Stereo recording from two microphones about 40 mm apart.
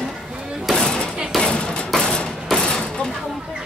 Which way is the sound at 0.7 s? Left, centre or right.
Centre.